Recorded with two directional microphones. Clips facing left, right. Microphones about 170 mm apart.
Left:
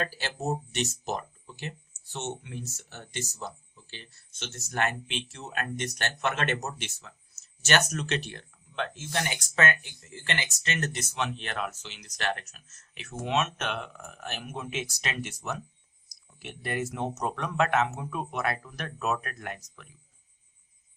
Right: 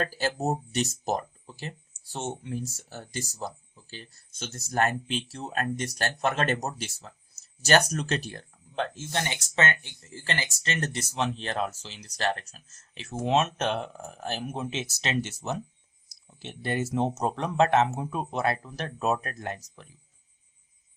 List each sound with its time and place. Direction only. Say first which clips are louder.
0.0 s speech: right 4 dB; 40° right (ahead or behind)